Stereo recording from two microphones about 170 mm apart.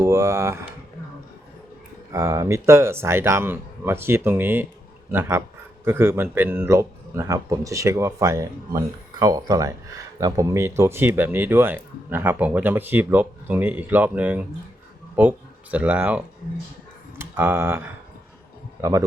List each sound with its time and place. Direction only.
0.0 s speech: 15° right (ahead or behind)
2.1 s speech: 15° right (ahead or behind)
5.8 s speech: 15° right (ahead or behind)